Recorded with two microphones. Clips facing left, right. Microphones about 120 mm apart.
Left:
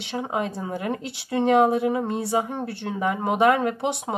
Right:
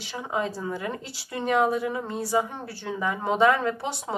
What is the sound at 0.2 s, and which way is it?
Speech, 15° left (ahead or behind).